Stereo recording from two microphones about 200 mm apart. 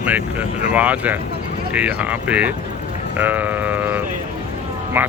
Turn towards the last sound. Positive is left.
turn(degrees=-10)  # may be behind; listen again after turning